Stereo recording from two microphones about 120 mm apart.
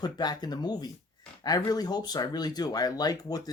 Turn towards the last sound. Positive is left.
turn(degrees=30)  # may be behind; listen again after turning